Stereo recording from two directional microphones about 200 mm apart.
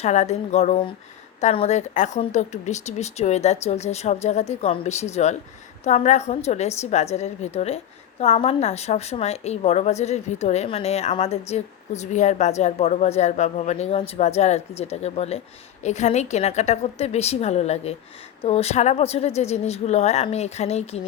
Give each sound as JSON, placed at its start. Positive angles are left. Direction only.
{"t": 0.0, "sound": "a woman's voice", "side_deg": 35}